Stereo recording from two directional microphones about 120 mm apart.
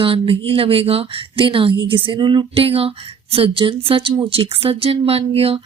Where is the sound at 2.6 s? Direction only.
55° right (ahead or behind).